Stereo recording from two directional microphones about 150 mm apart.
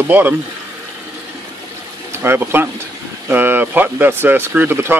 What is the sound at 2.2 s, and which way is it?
Speech, 15° right (ahead or behind).